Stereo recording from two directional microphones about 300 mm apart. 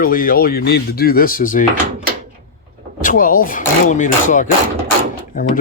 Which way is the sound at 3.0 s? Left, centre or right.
Left.